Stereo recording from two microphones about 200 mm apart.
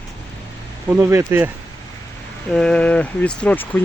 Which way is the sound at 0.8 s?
15° right (ahead or behind).